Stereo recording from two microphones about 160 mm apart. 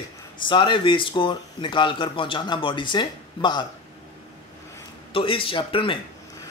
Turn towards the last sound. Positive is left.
turn(degrees=35)  # may be behind; listen again after turning